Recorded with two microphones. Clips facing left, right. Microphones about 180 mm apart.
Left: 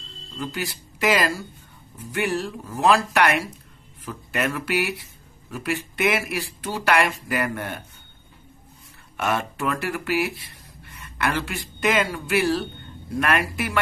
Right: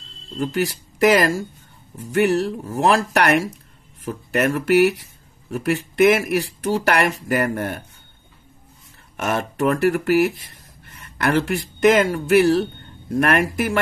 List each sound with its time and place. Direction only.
0.4 s speech: 45° right (ahead or behind)
9.6 s speech: 45° right (ahead or behind)